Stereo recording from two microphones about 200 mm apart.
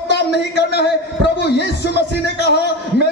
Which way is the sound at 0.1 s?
55° left (ahead or behind).